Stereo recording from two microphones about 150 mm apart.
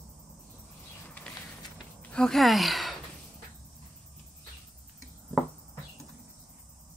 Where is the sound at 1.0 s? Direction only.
10° left (ahead or behind).